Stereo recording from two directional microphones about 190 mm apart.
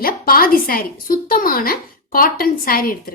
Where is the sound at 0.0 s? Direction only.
50° left (ahead or behind).